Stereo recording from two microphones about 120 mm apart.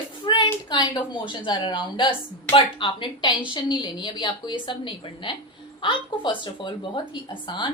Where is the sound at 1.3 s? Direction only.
40° left (ahead or behind).